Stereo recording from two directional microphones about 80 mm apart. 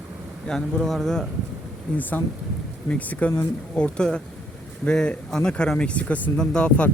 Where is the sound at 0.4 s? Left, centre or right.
Centre.